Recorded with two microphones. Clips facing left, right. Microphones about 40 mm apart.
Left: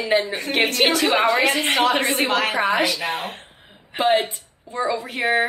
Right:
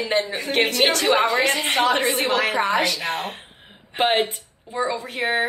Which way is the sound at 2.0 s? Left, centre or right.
Left.